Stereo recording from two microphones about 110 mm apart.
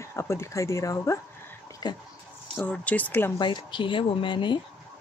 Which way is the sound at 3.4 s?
45° left (ahead or behind).